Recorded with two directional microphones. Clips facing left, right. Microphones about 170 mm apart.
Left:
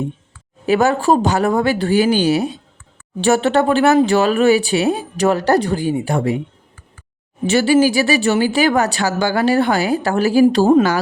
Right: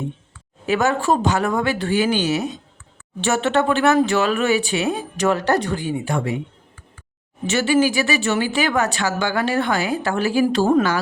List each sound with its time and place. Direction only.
0.6 s speech: 35° left (ahead or behind)
7.4 s speech: 35° left (ahead or behind)